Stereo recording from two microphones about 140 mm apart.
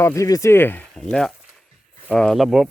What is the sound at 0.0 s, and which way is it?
Speech, 20° left (ahead or behind).